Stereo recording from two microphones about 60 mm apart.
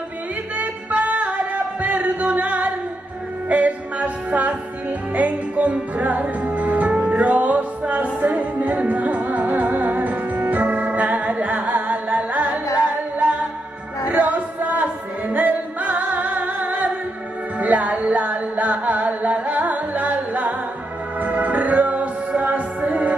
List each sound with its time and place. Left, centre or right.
0.6 s music: right
14.0 s music: right